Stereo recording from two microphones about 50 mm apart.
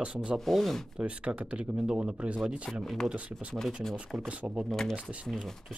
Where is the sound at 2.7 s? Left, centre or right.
Centre.